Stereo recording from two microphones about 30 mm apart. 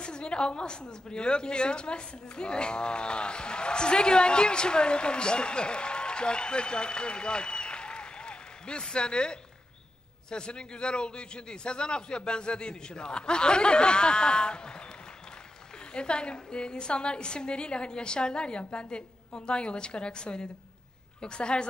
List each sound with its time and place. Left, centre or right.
0.0 s a woman's voice: left